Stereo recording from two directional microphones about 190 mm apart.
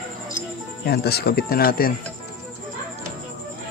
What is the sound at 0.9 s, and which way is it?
Speech, 55° left (ahead or behind).